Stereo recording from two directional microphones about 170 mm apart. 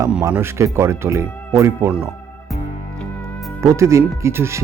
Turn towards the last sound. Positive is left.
turn(degrees=-15)  # may be behind; listen again after turning